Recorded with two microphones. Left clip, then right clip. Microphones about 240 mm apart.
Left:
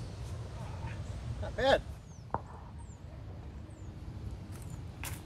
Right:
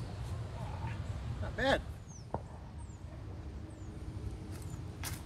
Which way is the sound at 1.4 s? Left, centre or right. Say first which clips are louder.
Left 4 dB; centre.